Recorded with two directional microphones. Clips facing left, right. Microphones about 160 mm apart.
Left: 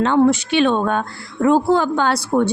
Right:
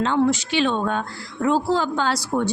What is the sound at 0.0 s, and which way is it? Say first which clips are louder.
Speech: left 5 dB; 55° left (ahead or behind).